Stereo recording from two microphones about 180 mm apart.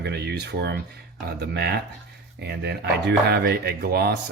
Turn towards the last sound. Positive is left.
turn(degrees=-60)  # may be behind; listen again after turning